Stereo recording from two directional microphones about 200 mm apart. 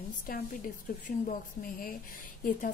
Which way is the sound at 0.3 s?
45° left (ahead or behind).